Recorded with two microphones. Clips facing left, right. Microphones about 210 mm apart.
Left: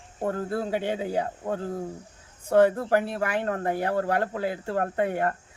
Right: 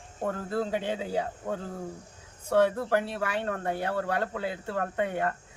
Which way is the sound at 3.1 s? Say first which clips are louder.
Left 3 dB; 50° left (ahead or behind).